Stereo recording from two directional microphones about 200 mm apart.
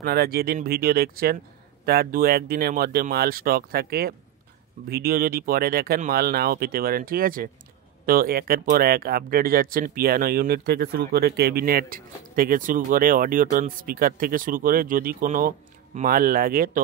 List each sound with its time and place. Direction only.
0.0 s speech: 50° right (ahead or behind)